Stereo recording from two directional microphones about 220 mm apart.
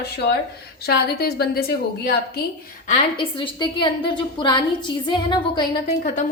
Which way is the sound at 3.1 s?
20° left (ahead or behind).